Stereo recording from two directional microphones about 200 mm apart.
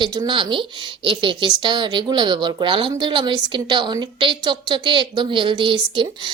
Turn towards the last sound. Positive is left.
turn(degrees=-25)  # may be behind; listen again after turning